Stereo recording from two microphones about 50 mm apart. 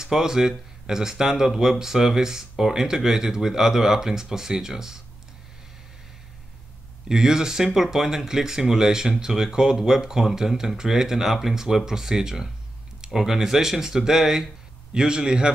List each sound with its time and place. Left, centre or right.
0.0 s speech: centre
7.1 s speech: centre